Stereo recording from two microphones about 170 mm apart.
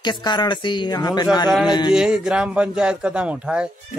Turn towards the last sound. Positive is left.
turn(degrees=-5)  # may be behind; listen again after turning